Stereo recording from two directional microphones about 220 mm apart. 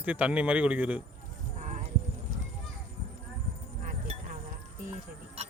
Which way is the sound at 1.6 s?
35° right (ahead or behind).